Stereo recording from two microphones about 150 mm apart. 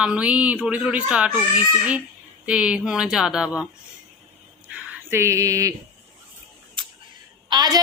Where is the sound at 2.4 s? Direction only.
5° right (ahead or behind).